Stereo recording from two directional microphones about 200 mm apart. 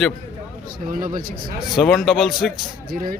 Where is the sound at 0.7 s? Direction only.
45° right (ahead or behind).